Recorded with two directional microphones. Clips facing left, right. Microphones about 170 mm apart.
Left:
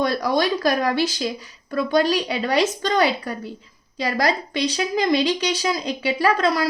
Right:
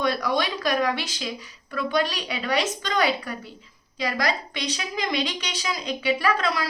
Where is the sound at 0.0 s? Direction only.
35° left (ahead or behind).